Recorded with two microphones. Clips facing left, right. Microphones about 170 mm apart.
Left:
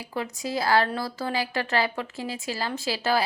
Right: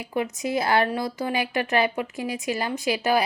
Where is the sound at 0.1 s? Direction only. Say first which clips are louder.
Right 4 dB; 20° right (ahead or behind).